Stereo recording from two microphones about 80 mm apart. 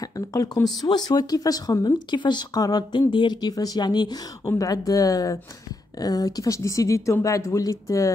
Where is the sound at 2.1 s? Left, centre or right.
Left.